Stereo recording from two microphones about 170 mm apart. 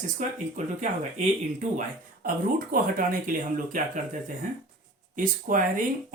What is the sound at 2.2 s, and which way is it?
Speech, 55° right (ahead or behind).